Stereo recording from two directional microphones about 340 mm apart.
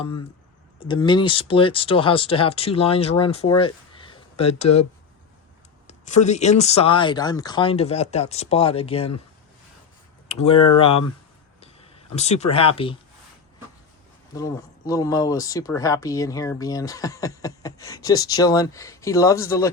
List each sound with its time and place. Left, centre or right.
0.8 s speech: centre
5.9 s speech: left
10.2 s speech: centre
14.3 s speech: centre